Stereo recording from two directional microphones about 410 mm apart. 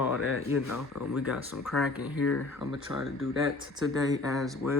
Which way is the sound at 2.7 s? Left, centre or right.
Centre.